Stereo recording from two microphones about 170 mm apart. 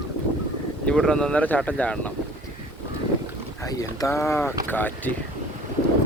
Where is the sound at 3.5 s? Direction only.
20° left (ahead or behind).